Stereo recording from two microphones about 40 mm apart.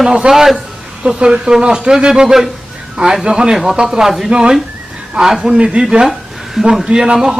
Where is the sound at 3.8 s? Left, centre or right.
Centre.